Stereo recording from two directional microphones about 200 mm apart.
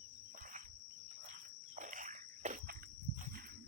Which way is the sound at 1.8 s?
40° right (ahead or behind).